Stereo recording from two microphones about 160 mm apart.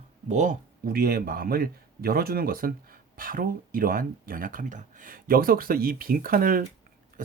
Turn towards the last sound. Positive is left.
turn(degrees=-65)  # may be behind; listen again after turning